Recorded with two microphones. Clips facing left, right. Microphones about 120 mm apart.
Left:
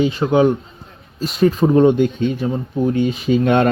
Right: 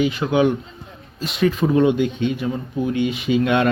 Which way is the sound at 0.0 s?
35° left (ahead or behind).